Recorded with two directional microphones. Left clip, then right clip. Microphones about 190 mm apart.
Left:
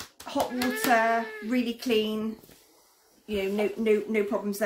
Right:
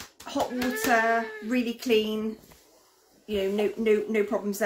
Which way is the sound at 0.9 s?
10° right (ahead or behind).